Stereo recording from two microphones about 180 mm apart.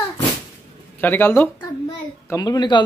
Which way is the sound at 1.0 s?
10° left (ahead or behind).